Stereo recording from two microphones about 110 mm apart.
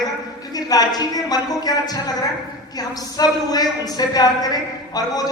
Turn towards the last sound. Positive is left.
turn(degrees=35)  # may be behind; listen again after turning